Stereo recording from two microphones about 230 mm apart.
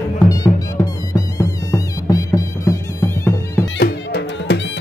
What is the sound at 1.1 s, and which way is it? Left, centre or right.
Music, centre.